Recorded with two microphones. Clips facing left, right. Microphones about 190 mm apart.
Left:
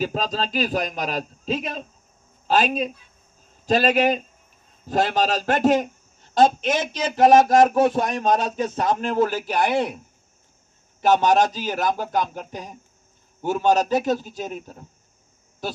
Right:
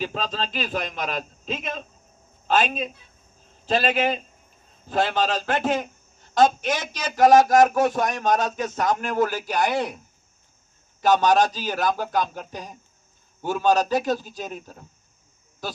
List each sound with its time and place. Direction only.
0.0 s a man's voice: 40° left (ahead or behind)
6.3 s speech: 25° left (ahead or behind)
11.0 s speech: 25° left (ahead or behind)